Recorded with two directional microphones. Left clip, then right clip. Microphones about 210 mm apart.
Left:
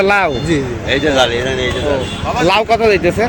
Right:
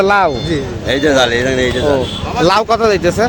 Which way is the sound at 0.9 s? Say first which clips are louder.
Right 1 dB; 55° right (ahead or behind).